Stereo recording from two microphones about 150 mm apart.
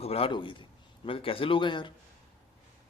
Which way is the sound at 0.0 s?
40° left (ahead or behind).